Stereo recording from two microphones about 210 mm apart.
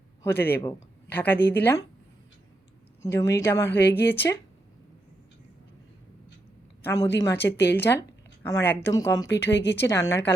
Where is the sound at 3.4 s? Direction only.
15° left (ahead or behind).